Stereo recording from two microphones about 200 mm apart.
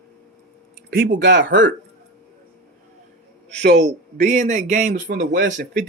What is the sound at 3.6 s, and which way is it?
A man's voice, 35° right (ahead or behind).